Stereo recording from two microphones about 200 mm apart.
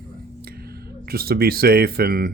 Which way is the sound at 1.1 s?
50° right (ahead or behind).